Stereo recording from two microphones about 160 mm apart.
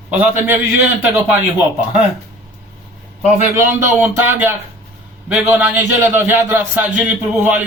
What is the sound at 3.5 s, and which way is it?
A man's voice, 15° right (ahead or behind).